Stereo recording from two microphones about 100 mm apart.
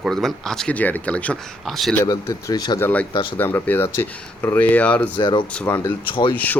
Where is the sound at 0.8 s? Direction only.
15° left (ahead or behind).